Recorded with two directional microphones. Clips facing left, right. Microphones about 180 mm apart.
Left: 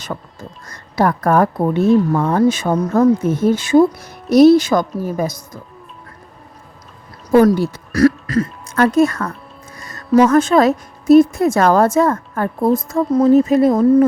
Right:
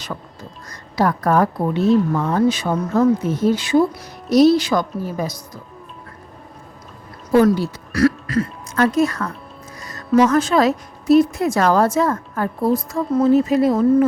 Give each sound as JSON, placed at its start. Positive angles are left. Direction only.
{"t": 0.1, "sound": "speech", "side_deg": 50}
{"t": 7.3, "sound": "a woman's voice", "side_deg": 50}